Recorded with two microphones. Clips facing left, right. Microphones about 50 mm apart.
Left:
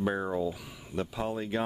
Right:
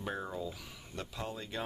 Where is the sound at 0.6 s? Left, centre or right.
Centre.